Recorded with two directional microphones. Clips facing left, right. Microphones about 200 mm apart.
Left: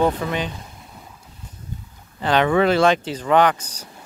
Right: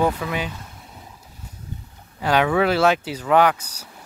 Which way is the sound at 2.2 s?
10° right (ahead or behind).